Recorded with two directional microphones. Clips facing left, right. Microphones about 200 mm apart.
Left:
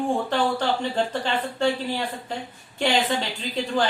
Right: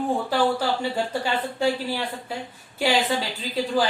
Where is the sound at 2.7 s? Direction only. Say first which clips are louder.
Even; 5° right (ahead or behind).